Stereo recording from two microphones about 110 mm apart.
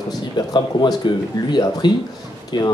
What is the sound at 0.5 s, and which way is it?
Speech, 45° left (ahead or behind).